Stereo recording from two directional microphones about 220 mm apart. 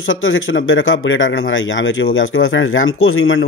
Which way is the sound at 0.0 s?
60° left (ahead or behind).